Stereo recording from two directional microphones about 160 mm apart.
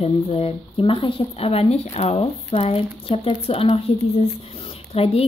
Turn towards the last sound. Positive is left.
turn(degrees=35)  # may be behind; listen again after turning